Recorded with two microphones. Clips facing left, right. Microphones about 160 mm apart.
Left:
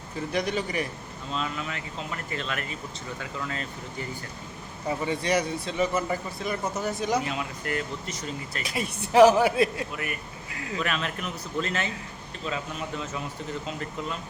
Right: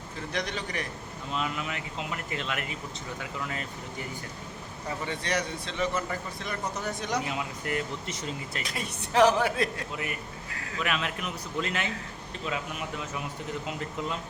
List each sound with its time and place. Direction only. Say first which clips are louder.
0.3 s a man's voice: left 6 dB; 10° left (ahead or behind)
1.3 s speech: even; 15° right (ahead or behind)
4.9 s a man's voice: left 6 dB; 10° left (ahead or behind)
7.3 s speech: left 1 dB; 20° right (ahead or behind)
8.6 s a man's voice: left 4 dB; 10° left (ahead or behind)
10.8 s speech: right 3 dB; 10° right (ahead or behind)